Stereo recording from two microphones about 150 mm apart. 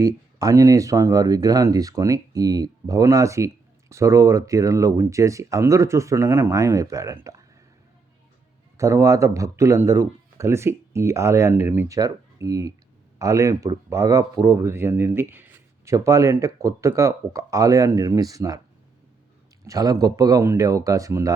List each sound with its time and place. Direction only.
0.0 s speech: 25° right (ahead or behind)
8.8 s speech: 20° right (ahead or behind)
19.6 s speech: 25° right (ahead or behind)